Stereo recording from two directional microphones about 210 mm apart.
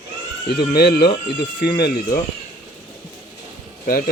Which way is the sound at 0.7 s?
45° left (ahead or behind).